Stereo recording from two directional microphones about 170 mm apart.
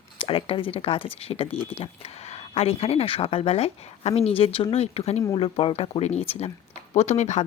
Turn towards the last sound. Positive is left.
turn(degrees=45)  # may be behind; listen again after turning